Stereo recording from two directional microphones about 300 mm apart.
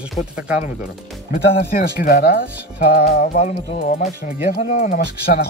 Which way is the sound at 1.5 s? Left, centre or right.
Left.